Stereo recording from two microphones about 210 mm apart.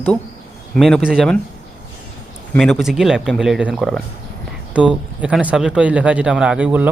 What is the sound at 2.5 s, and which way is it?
Speech, centre (ahead or behind).